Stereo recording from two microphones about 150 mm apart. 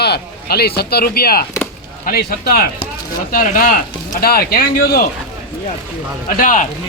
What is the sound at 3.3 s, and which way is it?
Speech, 70° left (ahead or behind).